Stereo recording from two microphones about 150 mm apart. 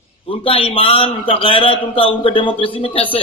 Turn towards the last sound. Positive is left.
turn(degrees=35)  # may be behind; listen again after turning